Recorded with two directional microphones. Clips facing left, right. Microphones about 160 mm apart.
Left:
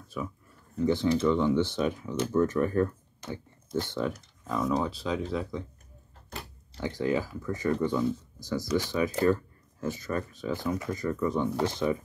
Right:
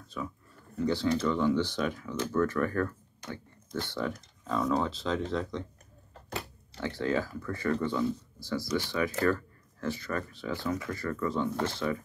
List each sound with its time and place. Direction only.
0.2 s speech: 10° left (ahead or behind)
6.8 s speech: 15° left (ahead or behind)